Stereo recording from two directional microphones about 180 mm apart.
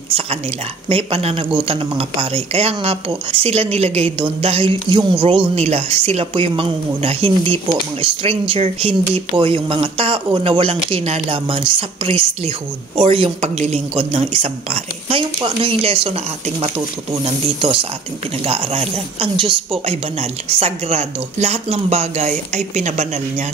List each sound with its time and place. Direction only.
0.8 s speech: 30° right (ahead or behind)